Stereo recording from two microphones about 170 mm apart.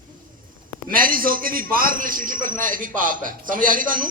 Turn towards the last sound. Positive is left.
turn(degrees=-55)  # may be behind; listen again after turning